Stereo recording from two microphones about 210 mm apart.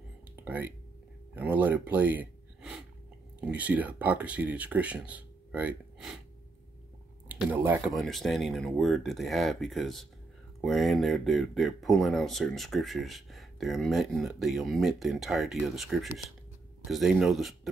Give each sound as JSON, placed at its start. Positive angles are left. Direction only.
{"t": 0.4, "sound": "speech", "side_deg": -10}
{"t": 7.2, "sound": "speech", "side_deg": -5}
{"t": 7.9, "sound": "speech", "side_deg": 0}